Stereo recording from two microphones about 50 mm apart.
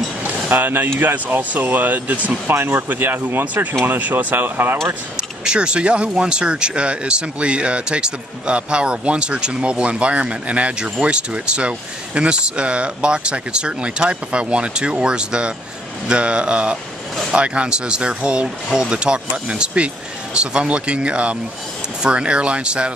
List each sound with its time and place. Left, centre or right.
0.5 s speech: right
2.4 s speech: right
2.9 s speech: right
5.4 s speech: centre